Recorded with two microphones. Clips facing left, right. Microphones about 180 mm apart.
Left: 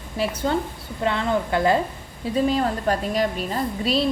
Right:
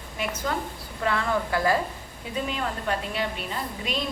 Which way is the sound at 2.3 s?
35° left (ahead or behind).